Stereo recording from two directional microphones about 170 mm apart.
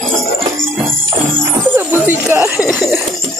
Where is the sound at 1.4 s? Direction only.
10° right (ahead or behind).